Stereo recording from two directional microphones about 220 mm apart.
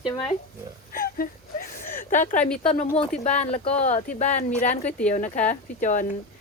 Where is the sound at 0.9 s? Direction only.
40° left (ahead or behind).